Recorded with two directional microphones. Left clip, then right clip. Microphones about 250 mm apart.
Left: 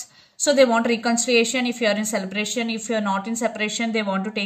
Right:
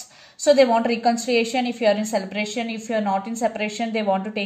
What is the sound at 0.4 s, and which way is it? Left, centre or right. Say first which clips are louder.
A woman's voice: right 1 dB; left.